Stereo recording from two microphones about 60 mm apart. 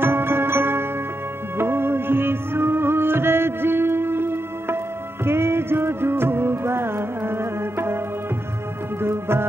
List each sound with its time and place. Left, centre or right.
0.0 s music: right
9.0 s music: right